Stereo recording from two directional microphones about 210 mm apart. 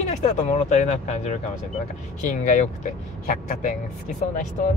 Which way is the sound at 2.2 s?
35° left (ahead or behind).